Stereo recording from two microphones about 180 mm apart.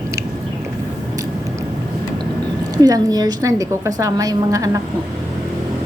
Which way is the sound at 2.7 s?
20° right (ahead or behind).